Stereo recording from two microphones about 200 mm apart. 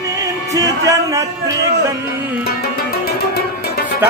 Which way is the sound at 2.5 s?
50° left (ahead or behind).